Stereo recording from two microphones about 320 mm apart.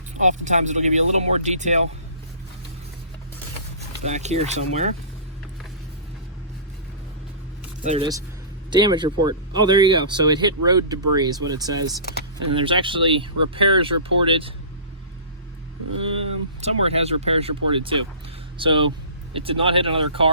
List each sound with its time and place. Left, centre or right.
0.1 s speech: right
4.0 s speech: right
7.9 s speech: centre
16.1 s speech: centre